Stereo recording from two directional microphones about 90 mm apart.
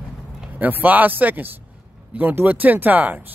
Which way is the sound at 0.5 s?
20° right (ahead or behind).